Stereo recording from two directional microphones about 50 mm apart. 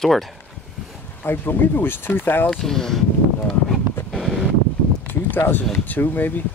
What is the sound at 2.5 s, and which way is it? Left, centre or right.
Speech, centre.